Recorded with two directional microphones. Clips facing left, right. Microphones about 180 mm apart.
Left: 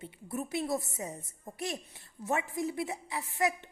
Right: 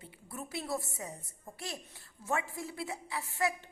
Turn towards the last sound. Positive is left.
turn(degrees=20)  # may be behind; listen again after turning